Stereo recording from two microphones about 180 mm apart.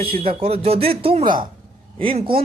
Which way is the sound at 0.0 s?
30° right (ahead or behind).